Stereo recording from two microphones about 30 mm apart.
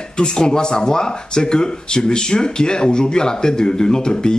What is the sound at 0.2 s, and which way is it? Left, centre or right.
Speech, left.